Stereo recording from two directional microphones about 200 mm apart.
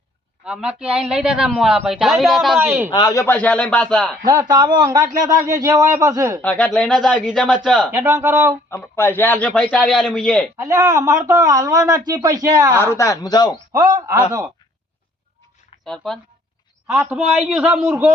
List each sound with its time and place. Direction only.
0.4 s a man's voice: 5° right (ahead or behind)
2.6 s speech: 10° right (ahead or behind)
2.9 s speech: 15° left (ahead or behind)
4.3 s speech: 20° right (ahead or behind)
6.4 s a man's voice: 5° left (ahead or behind)
7.9 s speech: 15° right (ahead or behind)
8.7 s a man's voice: 10° left (ahead or behind)
10.6 s speech: 15° right (ahead or behind)
12.8 s speech: 15° left (ahead or behind)
13.7 s speech: 20° right (ahead or behind)
15.8 s speech: centre (ahead or behind)